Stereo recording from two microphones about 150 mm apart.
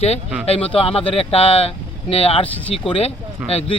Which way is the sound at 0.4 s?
40° left (ahead or behind).